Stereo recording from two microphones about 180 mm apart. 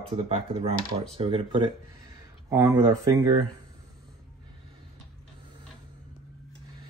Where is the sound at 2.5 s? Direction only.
20° right (ahead or behind).